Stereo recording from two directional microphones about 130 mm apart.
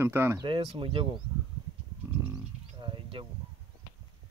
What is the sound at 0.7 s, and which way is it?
Speech, 40° right (ahead or behind).